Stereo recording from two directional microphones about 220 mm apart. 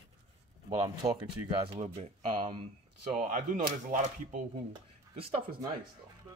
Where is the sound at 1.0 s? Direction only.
30° right (ahead or behind).